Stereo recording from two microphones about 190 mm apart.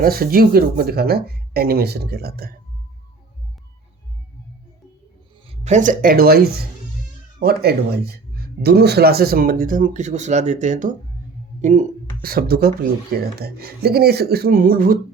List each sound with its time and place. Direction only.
0.0 s speech: 50° right (ahead or behind)
5.5 s speech: 35° right (ahead or behind)
12.2 s speech: 50° right (ahead or behind)